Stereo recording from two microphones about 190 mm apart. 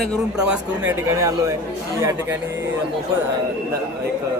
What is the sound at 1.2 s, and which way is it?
Speech, 15° right (ahead or behind).